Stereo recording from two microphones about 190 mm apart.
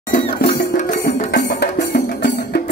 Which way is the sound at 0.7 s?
55° left (ahead or behind).